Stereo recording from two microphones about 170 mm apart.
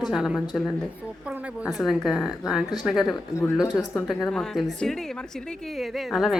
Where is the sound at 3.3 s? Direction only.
20° left (ahead or behind).